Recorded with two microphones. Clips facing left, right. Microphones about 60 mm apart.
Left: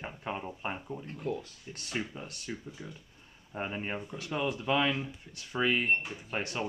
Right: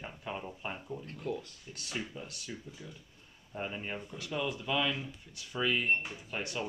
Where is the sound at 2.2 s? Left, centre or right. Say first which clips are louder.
Left 3 dB; left.